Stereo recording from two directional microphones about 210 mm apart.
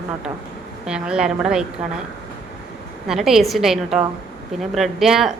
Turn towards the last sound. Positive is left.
turn(degrees=0)  # may be behind; listen again after turning